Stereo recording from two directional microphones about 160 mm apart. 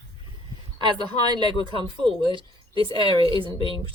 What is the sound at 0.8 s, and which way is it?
Speech, 30° right (ahead or behind).